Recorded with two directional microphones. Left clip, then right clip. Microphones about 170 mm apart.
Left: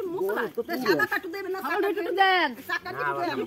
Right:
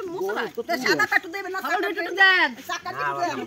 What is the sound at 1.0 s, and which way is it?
Speech, 15° right (ahead or behind).